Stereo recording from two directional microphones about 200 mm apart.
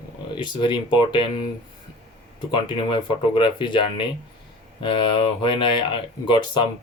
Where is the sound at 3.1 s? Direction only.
25° left (ahead or behind).